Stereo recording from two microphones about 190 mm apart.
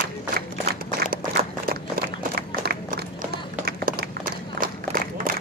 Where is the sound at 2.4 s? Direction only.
55° right (ahead or behind).